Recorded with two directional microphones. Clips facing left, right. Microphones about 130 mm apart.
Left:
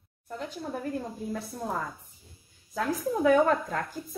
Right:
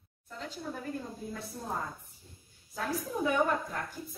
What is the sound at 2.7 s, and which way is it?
A woman's voice, 90° left.